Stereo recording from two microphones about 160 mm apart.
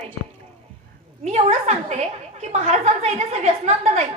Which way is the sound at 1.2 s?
45° right (ahead or behind).